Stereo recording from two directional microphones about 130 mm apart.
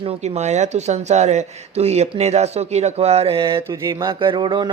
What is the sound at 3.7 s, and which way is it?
Speech, 30° right (ahead or behind).